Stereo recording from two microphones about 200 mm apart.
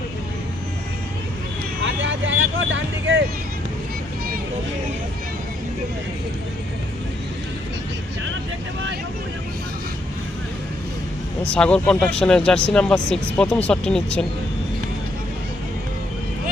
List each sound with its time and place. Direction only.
1.8 s vehicle: 65° right (ahead or behind)
11.5 s speech: 5° left (ahead or behind)